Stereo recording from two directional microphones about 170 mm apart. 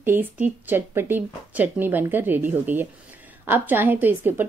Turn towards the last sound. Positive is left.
turn(degrees=-10)  # may be behind; listen again after turning